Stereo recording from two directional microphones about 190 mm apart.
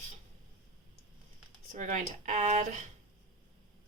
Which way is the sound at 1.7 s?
40° right (ahead or behind).